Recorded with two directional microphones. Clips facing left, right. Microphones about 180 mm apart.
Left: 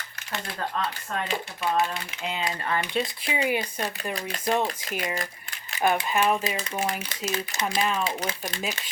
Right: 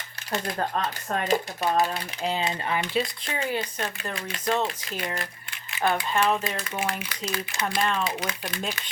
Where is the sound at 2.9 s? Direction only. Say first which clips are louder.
Even; 5° left (ahead or behind).